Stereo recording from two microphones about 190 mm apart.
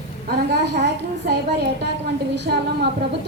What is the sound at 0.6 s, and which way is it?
Speech, 60° right (ahead or behind).